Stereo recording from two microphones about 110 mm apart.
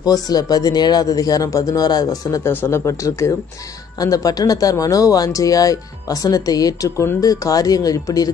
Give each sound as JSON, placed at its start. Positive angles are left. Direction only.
{"t": 0.0, "sound": "speech", "side_deg": 35}
{"t": 2.4, "sound": "speech", "side_deg": 20}